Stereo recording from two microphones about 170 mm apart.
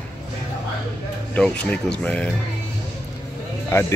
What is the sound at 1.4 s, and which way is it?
Speech, 5° left (ahead or behind).